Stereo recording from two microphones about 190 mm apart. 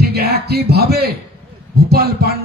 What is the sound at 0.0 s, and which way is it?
A man's voice, 55° right (ahead or behind).